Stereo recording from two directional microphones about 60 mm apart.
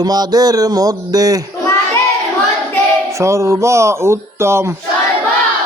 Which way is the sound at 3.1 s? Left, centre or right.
Right.